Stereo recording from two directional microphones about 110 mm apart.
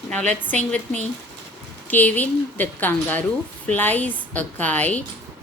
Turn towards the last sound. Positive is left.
turn(degrees=15)  # may be behind; listen again after turning